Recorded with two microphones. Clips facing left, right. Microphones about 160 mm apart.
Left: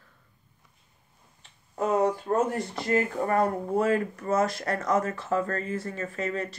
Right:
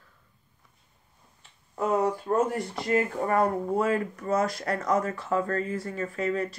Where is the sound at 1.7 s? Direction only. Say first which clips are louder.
Left 1 dB; 40° left (ahead or behind).